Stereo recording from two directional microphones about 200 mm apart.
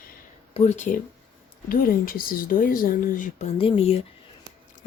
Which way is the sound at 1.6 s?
45° left (ahead or behind).